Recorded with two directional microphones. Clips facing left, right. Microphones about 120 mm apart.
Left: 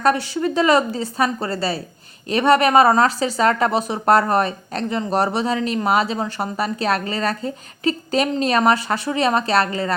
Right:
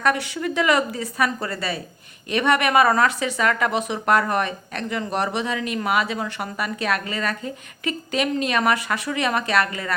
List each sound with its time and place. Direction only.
0.0 s a woman's voice: 30° left (ahead or behind)